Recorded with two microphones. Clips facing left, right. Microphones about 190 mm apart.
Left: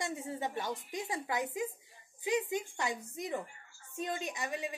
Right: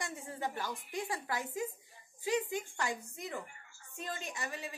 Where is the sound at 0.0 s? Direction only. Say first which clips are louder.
Left 3 dB; 20° left (ahead or behind).